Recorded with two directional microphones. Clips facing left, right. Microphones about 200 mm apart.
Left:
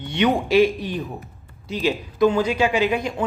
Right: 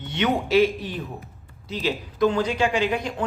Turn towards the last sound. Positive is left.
turn(degrees=10)  # may be behind; listen again after turning